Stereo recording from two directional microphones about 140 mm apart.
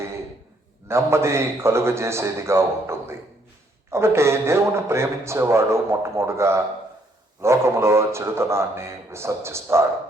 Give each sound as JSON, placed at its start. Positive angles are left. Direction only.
{"t": 0.9, "sound": "a man's voice", "side_deg": -20}